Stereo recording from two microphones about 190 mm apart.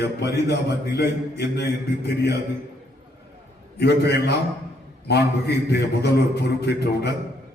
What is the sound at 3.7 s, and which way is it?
A man's voice, 60° left (ahead or behind).